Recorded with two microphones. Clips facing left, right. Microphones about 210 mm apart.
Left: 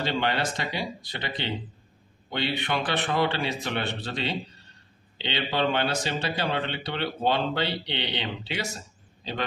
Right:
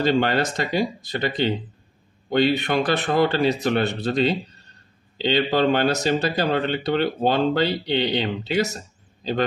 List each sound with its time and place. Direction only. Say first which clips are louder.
0.0 s speech: right 7 dB; 45° right (ahead or behind)